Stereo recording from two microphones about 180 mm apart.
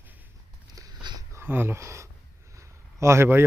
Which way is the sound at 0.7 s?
20° right (ahead or behind).